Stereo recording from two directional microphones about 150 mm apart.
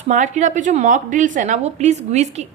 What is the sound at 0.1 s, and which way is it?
A woman's voice, 55° right (ahead or behind).